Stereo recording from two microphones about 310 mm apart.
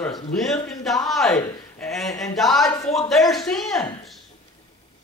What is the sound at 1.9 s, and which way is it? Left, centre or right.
Speech, centre.